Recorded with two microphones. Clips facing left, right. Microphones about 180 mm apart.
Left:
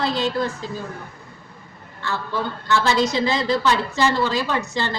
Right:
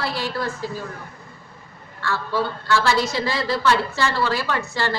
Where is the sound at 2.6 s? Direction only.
20° left (ahead or behind).